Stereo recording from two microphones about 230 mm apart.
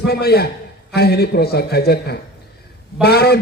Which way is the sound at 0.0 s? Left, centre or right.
Left.